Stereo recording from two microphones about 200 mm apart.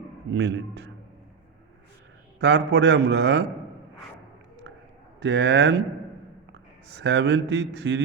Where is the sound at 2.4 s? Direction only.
60° right (ahead or behind).